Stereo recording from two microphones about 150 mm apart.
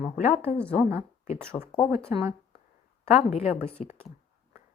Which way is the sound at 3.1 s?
45° left (ahead or behind).